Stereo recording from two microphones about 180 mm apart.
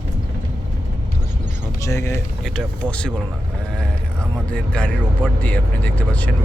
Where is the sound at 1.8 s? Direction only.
15° left (ahead or behind).